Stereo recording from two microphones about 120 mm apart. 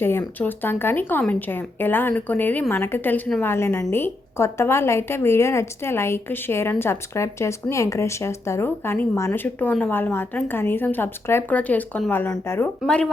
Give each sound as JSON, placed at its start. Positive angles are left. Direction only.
{"t": 0.0, "sound": "a woman's voice", "side_deg": 20}